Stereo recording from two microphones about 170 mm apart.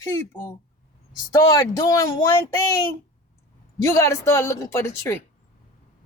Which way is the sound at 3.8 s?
15° left (ahead or behind).